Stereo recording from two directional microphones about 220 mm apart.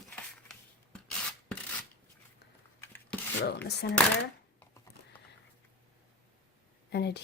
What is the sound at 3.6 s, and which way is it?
Speech, 50° left (ahead or behind).